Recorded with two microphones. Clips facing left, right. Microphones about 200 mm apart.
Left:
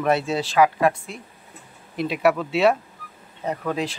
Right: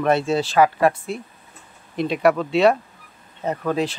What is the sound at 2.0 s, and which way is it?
Speech, 5° left (ahead or behind).